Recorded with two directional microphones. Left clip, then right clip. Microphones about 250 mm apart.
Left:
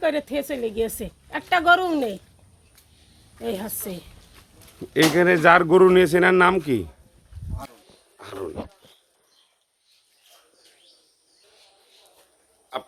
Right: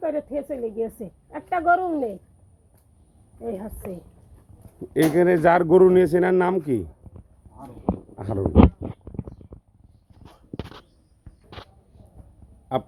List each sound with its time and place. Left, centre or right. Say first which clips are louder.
0.0 s a woman's voice: left 3 dB; left
3.4 s a woman's voice: left 2 dB; left
5.0 s speech: left 2 dB; centre
8.2 s speech: right 11 dB; centre